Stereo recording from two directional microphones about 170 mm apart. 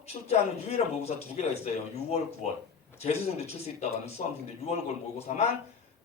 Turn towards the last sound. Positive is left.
turn(degrees=40)  # may be behind; listen again after turning